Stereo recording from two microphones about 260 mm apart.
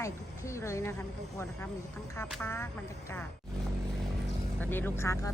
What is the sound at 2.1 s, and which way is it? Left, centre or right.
Speech, centre.